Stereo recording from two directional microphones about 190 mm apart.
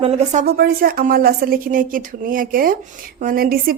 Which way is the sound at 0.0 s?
30° right (ahead or behind).